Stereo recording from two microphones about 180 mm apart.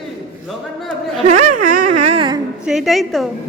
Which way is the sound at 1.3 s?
45° right (ahead or behind).